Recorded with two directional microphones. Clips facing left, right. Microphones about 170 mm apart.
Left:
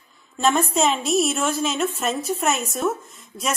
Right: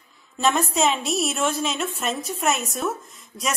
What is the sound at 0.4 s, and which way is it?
A woman's voice, centre (ahead or behind).